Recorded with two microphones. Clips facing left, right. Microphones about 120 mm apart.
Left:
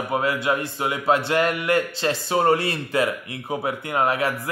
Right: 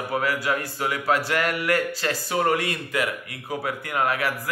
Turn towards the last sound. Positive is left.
turn(degrees=25)  # may be behind; listen again after turning